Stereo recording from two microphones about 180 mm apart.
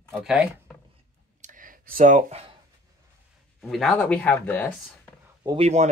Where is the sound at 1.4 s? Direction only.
50° right (ahead or behind).